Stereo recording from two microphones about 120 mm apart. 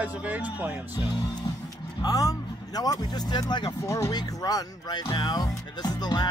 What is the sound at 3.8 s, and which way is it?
Speech, 25° left (ahead or behind).